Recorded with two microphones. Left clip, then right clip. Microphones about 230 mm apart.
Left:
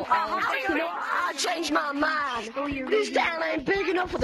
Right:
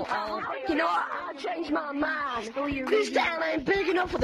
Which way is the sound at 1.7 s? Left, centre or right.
Left.